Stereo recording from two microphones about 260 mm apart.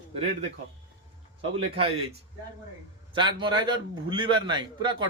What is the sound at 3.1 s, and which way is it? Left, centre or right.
A man's voice, centre.